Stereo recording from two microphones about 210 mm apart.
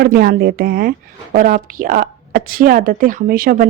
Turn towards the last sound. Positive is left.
turn(degrees=-45)  # may be behind; listen again after turning